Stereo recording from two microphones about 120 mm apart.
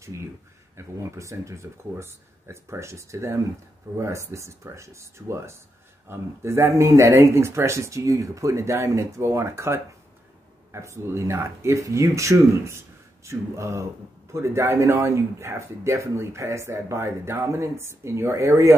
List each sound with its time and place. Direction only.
0.0 s speech: 25° right (ahead or behind)